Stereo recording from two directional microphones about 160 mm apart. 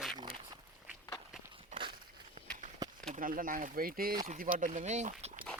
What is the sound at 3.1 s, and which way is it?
Speech, 60° right (ahead or behind).